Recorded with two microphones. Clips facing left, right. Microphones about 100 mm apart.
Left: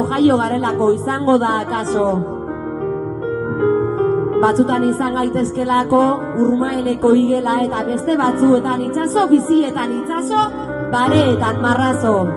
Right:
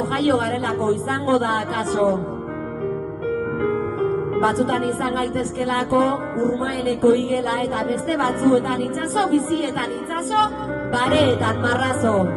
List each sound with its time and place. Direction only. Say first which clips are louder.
0.2 s a woman's voice: left 7 dB; 30° left (ahead or behind)
3.6 s a woman's voice: left 8 dB; 30° left (ahead or behind)
11.0 s a woman's voice: left 4 dB; 30° left (ahead or behind)